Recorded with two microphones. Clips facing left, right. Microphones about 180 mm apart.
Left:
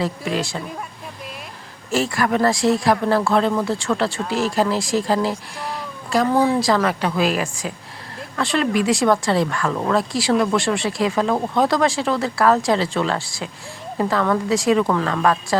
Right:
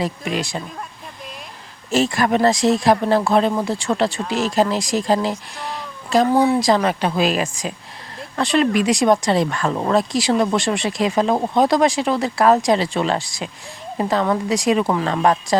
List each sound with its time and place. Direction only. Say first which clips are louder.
0.0 s speech: even; 15° right (ahead or behind)
1.9 s speech: right 2 dB; 20° right (ahead or behind)